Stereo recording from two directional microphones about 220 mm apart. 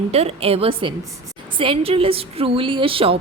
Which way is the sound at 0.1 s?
30° right (ahead or behind).